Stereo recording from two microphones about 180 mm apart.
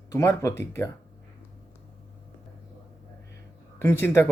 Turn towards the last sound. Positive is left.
turn(degrees=10)  # may be behind; listen again after turning